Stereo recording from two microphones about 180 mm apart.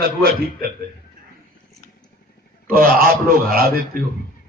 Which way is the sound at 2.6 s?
55° right (ahead or behind).